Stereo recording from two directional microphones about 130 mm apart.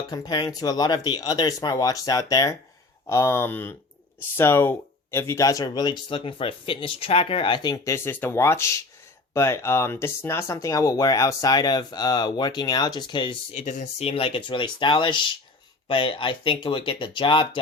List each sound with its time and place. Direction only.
0.1 s speech: 30° left (ahead or behind)
7.9 s speech: 15° left (ahead or behind); by 13.4 s 40° left (ahead or behind)
13.5 s speech: 65° left (ahead or behind)
14.1 s speech: 45° left (ahead or behind)